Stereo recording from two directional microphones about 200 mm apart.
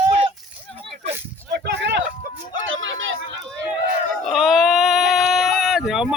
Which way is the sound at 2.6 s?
70° right (ahead or behind).